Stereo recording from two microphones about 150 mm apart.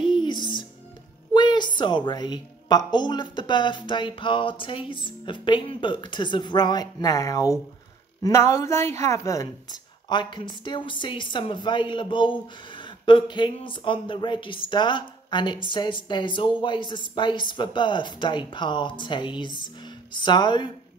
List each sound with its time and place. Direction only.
0.0 s music: 30° left (ahead or behind)
1.3 s speech: 30° left (ahead or behind)